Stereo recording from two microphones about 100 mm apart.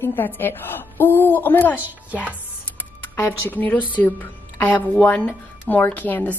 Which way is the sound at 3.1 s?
20° left (ahead or behind).